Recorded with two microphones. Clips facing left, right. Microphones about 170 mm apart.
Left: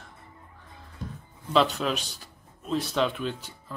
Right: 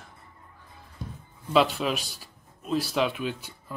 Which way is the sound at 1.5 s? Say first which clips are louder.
Right 1 dB; 5° right (ahead or behind).